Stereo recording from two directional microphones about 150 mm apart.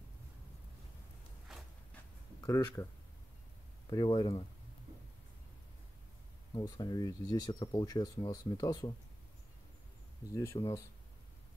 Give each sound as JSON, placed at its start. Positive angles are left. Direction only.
{"t": 2.4, "sound": "speech", "side_deg": 25}
{"t": 3.9, "sound": "speech", "side_deg": 25}
{"t": 6.5, "sound": "speech", "side_deg": 25}
{"t": 10.3, "sound": "speech", "side_deg": 20}